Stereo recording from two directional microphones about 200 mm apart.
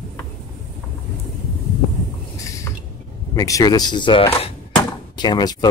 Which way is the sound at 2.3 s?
15° left (ahead or behind).